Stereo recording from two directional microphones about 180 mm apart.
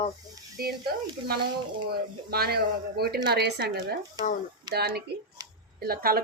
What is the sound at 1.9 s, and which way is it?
A woman's voice, 60° right (ahead or behind).